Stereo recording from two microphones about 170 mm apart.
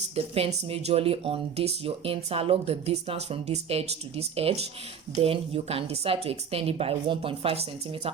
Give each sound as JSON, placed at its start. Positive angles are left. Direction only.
{"t": 0.3, "sound": "speech", "side_deg": -35}